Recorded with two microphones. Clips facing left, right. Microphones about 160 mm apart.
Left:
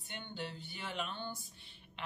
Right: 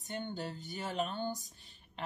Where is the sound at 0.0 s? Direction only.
40° right (ahead or behind).